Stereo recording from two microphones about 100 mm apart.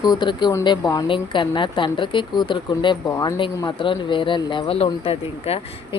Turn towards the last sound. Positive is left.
turn(degrees=80)